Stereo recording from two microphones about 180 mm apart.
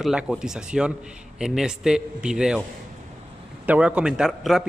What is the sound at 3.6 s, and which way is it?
Speech, 5° right (ahead or behind).